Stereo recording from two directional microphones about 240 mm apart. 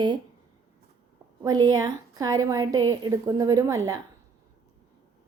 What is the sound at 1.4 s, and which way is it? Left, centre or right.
A woman's voice, centre.